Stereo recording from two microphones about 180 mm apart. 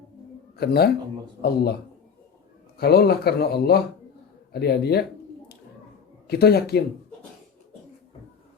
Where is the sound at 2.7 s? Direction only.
60° left (ahead or behind).